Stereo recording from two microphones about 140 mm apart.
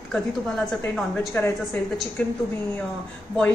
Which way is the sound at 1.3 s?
15° left (ahead or behind).